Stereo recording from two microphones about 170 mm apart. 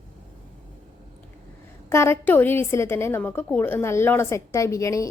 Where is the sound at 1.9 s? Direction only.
15° left (ahead or behind).